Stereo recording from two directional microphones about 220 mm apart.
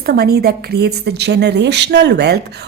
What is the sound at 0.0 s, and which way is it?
A woman's voice, 45° right (ahead or behind).